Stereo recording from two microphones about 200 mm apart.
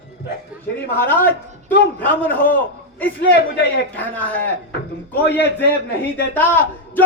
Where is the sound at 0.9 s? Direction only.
10° left (ahead or behind).